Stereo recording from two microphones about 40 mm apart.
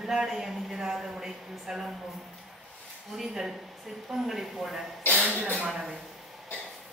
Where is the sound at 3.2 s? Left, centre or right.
Centre.